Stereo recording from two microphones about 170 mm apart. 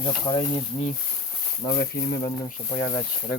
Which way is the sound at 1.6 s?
65° left (ahead or behind).